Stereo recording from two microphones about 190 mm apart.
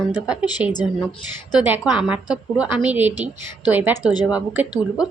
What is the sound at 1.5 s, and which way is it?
A woman's voice, 5° right (ahead or behind).